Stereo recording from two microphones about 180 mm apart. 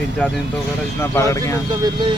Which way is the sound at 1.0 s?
15° left (ahead or behind).